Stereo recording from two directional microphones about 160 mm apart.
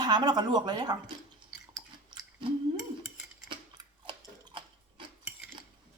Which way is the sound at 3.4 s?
30° right (ahead or behind).